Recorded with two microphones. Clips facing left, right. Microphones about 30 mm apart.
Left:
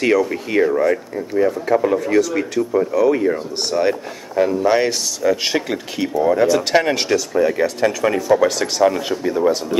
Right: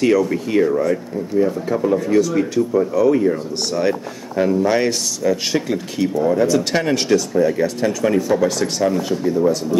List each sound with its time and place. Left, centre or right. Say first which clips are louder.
0.0 s speech: right 1 dB; centre
0.7 s speech: left 1 dB; left